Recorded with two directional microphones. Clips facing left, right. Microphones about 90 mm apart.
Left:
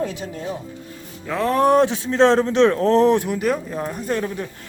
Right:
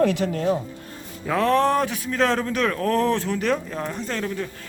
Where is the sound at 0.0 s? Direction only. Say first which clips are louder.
Right 6 dB; 70° right (ahead or behind).